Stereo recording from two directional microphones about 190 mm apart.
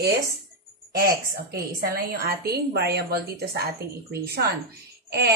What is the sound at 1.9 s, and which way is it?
A woman's voice, 55° right (ahead or behind).